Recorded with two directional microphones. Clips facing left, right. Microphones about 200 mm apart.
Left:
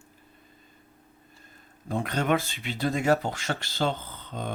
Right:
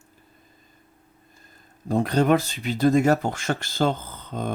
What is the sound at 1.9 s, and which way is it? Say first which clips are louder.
Speech: right 6 dB; 35° right (ahead or behind).